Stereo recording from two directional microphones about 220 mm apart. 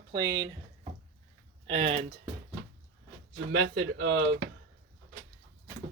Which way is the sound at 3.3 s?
55° right (ahead or behind).